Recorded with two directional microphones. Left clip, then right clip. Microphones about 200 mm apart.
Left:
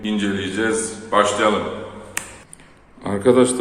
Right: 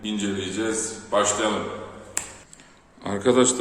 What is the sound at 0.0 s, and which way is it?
A man's voice, 5° left (ahead or behind).